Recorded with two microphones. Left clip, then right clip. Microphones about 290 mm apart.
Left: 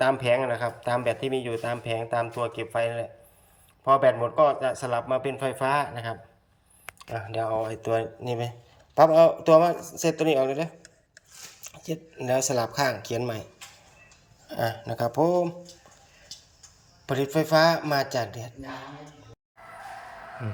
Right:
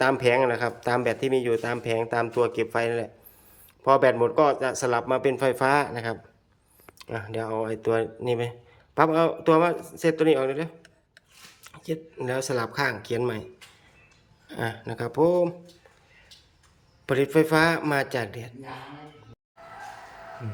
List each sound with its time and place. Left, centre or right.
0.0 s speech: centre
14.6 s speech: centre
17.1 s speech: centre